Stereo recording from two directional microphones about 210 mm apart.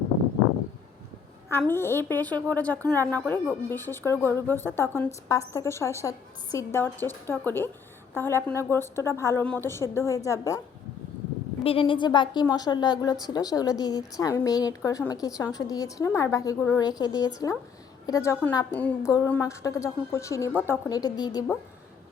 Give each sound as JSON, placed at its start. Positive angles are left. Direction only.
{"t": 1.5, "sound": "a woman's voice", "side_deg": 10}
{"t": 11.6, "sound": "a woman's voice", "side_deg": 25}